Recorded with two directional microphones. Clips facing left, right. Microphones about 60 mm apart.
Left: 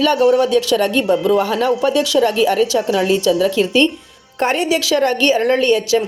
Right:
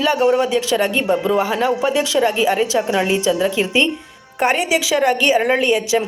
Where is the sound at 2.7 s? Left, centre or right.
Right.